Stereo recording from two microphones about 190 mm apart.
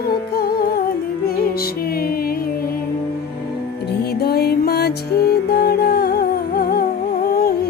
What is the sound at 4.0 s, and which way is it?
Music, 55° left (ahead or behind).